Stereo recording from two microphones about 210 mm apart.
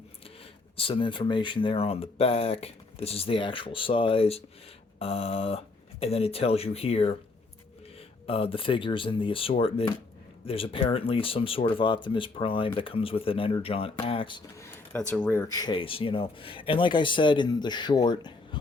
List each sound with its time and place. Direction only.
0.8 s speech: 25° left (ahead or behind)
8.3 s speech: 25° left (ahead or behind)
15.1 s speech: 5° left (ahead or behind)
15.5 s speech: 20° left (ahead or behind)